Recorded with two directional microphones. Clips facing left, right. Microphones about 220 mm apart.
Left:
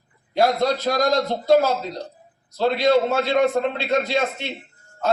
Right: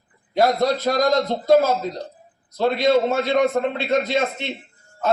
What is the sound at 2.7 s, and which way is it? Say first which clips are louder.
A man's voice: even; 20° right (ahead or behind).